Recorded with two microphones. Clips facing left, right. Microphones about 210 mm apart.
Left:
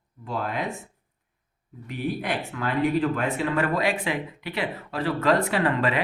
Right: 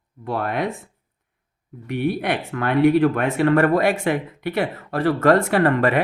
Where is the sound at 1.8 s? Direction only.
65° right (ahead or behind).